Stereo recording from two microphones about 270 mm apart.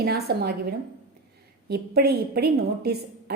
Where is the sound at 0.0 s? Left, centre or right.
Right.